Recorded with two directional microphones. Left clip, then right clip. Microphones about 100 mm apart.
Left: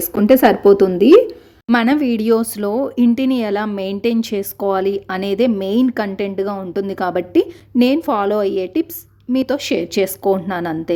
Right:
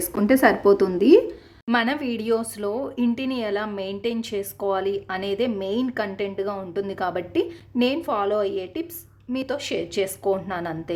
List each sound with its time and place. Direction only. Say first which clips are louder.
0.2 s a woman's voice: left 7 dB; 30° left (ahead or behind)
1.7 s speech: left 7 dB; 50° left (ahead or behind)